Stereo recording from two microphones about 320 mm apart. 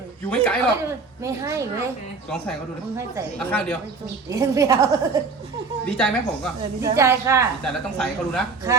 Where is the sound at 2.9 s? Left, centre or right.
Centre.